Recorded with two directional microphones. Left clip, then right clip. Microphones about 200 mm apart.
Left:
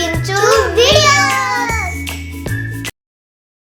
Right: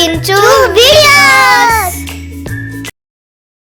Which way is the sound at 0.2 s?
45° right (ahead or behind).